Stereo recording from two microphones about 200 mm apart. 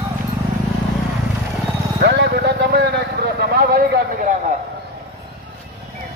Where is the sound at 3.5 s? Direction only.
50° right (ahead or behind).